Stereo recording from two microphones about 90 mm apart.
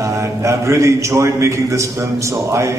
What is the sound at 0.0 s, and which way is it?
A man's voice, 35° right (ahead or behind).